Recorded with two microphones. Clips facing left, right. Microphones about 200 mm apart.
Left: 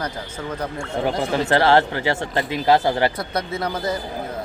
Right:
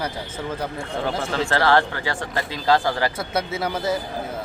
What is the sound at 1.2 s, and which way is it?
Speech, 15° left (ahead or behind).